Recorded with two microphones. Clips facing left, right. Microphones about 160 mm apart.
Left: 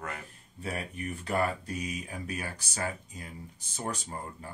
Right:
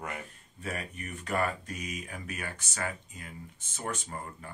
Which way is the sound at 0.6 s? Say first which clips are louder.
Left 2 dB; 30° left (ahead or behind).